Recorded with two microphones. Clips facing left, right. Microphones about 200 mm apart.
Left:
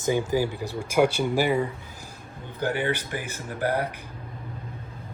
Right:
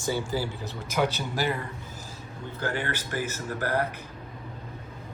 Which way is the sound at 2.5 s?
15° left (ahead or behind).